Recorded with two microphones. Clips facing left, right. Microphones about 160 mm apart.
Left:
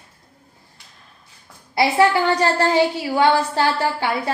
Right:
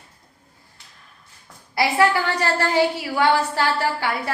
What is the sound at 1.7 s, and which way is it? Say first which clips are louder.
A woman's voice: left 3 dB; 20° left (ahead or behind).